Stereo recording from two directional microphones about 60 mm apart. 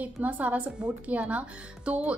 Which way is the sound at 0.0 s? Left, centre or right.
Right.